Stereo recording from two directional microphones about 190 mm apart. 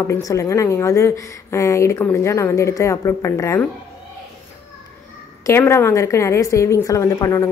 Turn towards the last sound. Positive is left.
turn(degrees=15)  # may be behind; listen again after turning